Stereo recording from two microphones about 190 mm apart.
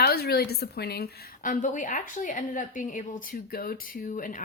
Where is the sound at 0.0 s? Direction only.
55° left (ahead or behind).